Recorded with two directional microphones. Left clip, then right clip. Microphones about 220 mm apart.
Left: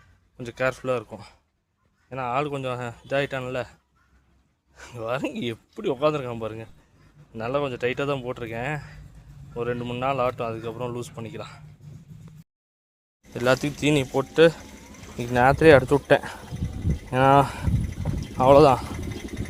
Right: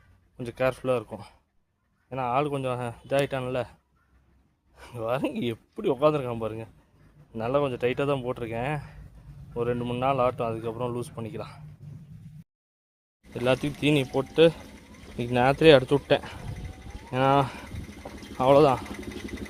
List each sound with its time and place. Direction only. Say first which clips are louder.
0.3 s speech: left 1 dB; 5° right (ahead or behind)
13.3 s speech: left 3 dB; 10° left (ahead or behind)
17.1 s a sound: left 5 dB; 15° left (ahead or behind)